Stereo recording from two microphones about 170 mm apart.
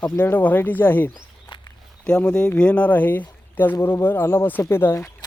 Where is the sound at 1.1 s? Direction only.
25° left (ahead or behind).